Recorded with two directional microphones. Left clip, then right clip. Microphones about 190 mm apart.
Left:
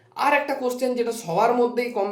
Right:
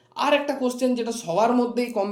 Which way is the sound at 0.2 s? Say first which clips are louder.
Left 1 dB; 45° right (ahead or behind).